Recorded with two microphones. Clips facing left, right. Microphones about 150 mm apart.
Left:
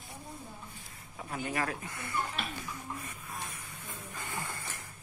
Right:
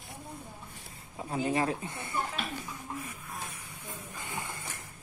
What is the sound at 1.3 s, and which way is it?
Speech, 30° right (ahead or behind).